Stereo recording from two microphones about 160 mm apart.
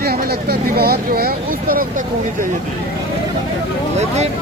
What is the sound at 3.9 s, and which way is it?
Speech, 45° right (ahead or behind).